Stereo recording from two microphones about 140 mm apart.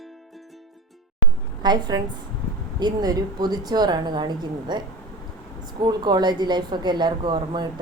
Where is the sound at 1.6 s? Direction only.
30° right (ahead or behind).